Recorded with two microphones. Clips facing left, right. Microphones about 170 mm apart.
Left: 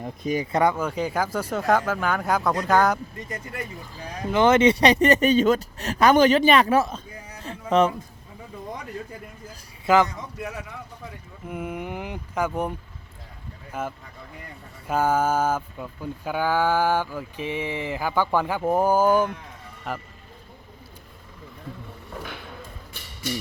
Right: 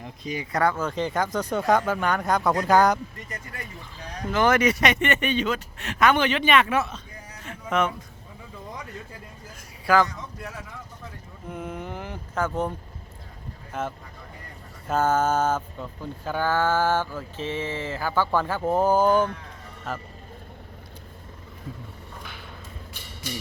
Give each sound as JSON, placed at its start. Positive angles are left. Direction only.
{"t": 0.0, "sound": "speech", "side_deg": 50}
{"t": 0.5, "sound": "speech", "side_deg": 20}
{"t": 4.3, "sound": "speech", "side_deg": 20}
{"t": 7.4, "sound": "a sound", "side_deg": 35}
{"t": 9.8, "sound": "a man's voice", "side_deg": 20}
{"t": 11.4, "sound": "speech", "side_deg": 10}
{"t": 13.7, "sound": "speech", "side_deg": 10}